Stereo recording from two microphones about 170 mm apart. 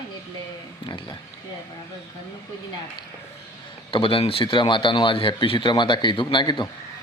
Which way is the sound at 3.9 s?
30° left (ahead or behind).